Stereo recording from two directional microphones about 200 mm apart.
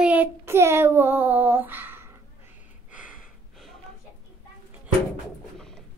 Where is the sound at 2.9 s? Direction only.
5° right (ahead or behind).